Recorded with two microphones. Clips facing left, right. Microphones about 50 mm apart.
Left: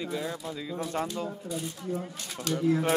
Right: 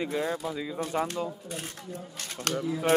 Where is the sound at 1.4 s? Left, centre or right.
Right.